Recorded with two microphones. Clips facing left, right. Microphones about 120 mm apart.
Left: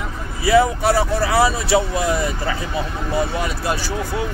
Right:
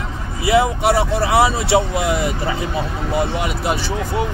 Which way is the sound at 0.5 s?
20° right (ahead or behind).